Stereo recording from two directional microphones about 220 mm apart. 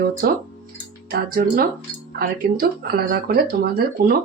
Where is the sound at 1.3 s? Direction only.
40° right (ahead or behind).